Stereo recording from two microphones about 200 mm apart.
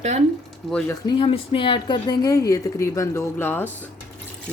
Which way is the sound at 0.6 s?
5° left (ahead or behind).